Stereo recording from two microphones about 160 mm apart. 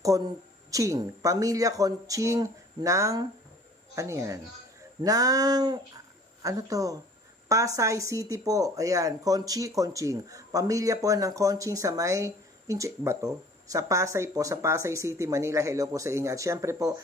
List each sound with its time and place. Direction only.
0.7 s speech: 20° right (ahead or behind)